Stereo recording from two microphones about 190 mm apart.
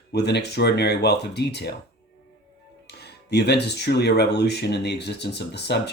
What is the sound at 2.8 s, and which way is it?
Speech, 60° left (ahead or behind).